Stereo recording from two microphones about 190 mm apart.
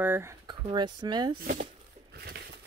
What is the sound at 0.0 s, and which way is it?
Speech, 10° right (ahead or behind).